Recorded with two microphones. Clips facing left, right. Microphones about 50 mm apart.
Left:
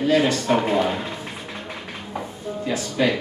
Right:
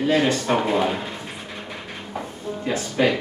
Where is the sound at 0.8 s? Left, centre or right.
Centre.